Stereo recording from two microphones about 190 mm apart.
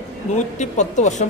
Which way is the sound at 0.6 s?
40° left (ahead or behind).